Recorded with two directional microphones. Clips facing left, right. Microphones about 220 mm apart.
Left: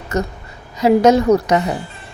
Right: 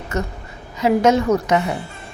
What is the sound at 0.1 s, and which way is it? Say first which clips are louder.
A woman's voice: left 4 dB; 40° left (ahead or behind).